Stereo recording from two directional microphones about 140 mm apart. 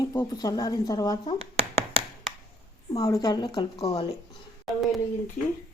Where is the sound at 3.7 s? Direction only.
45° left (ahead or behind).